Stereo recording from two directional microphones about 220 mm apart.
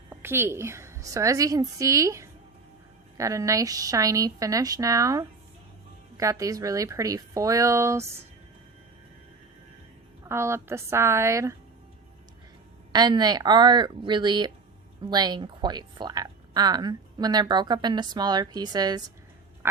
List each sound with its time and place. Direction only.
0.1 s a woman's voice: 10° right (ahead or behind)
10.2 s a woman's voice: 10° right (ahead or behind)
12.9 s speech: 20° right (ahead or behind)